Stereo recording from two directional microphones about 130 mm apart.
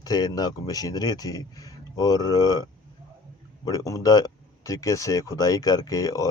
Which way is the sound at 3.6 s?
25° left (ahead or behind).